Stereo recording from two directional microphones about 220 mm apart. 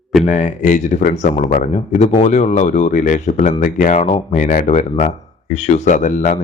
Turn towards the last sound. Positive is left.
turn(degrees=35)  # may be behind; listen again after turning